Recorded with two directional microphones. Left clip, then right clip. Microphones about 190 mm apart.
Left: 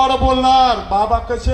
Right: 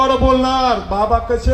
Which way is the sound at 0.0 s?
40° right (ahead or behind).